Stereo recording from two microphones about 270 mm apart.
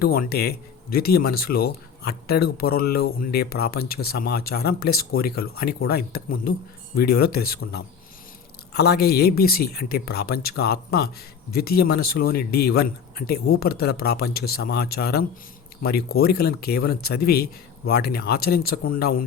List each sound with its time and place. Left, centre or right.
0.0 s speech: left